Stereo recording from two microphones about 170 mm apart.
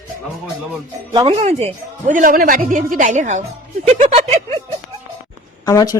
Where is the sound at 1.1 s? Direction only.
35° right (ahead or behind).